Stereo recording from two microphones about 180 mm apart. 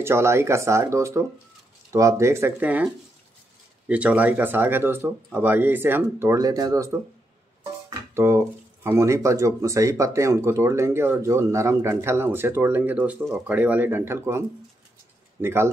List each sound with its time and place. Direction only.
0.0 s speech: 15° right (ahead or behind)
8.1 s speech: 15° right (ahead or behind)
15.4 s speech: 15° right (ahead or behind)